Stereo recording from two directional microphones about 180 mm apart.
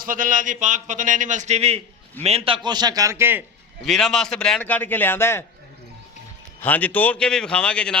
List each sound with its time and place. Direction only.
0.0 s a man's voice: 50° right (ahead or behind); by 3.4 s 15° right (ahead or behind)
3.8 s a man's voice: centre (ahead or behind)
6.6 s a man's voice: 10° left (ahead or behind)